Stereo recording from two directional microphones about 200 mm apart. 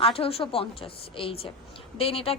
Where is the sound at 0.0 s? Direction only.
30° left (ahead or behind).